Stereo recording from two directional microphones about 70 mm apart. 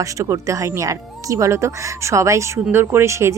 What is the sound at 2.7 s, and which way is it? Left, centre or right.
Speech, right.